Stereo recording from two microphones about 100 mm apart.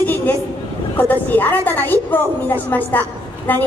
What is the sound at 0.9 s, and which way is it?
A woman's voice, 15° left (ahead or behind).